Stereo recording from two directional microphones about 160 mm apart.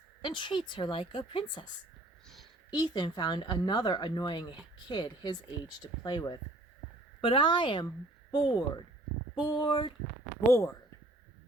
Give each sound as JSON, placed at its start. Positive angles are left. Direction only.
{"t": 0.2, "sound": "a woman's voice", "side_deg": 30}